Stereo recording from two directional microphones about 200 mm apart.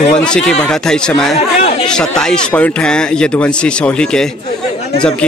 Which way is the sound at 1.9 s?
5° left (ahead or behind).